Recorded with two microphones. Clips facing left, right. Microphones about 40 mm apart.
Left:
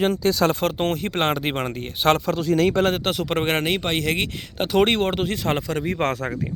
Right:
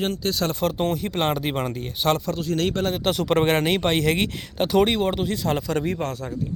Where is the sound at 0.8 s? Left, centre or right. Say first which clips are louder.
Left 1 dB; left.